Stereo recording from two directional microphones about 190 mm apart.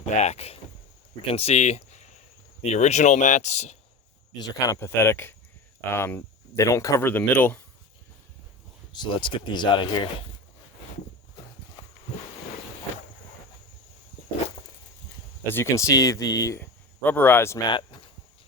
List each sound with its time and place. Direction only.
0.0 s speech: 35° left (ahead or behind)
4.4 s speech: 20° left (ahead or behind)
8.9 s speech: 25° left (ahead or behind)
15.4 s speech: 15° left (ahead or behind)